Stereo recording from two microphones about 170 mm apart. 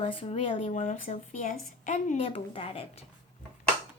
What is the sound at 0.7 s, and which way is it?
Speech, 50° left (ahead or behind).